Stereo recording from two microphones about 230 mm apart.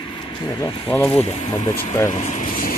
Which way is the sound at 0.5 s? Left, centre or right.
Centre.